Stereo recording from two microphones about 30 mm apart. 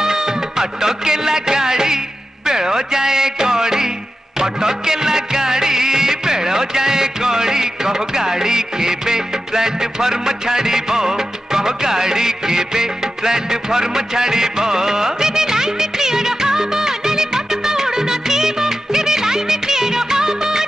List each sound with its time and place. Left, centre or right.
0.0 s music: centre